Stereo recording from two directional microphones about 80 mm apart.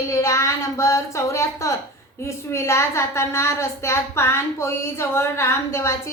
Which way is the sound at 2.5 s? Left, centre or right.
Left.